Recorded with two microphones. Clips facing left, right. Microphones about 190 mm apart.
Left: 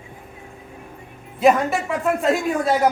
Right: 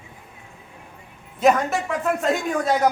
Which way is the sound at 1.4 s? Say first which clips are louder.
Left 2 dB; centre (ahead or behind).